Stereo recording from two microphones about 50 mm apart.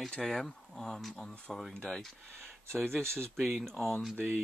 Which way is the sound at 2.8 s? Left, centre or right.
Right.